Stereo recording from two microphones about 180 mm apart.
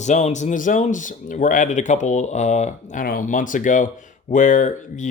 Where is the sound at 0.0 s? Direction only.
40° left (ahead or behind).